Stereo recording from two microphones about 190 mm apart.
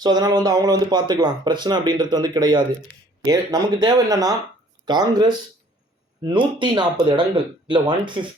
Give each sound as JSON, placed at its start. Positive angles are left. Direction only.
{"t": 0.0, "sound": "speech", "side_deg": -20}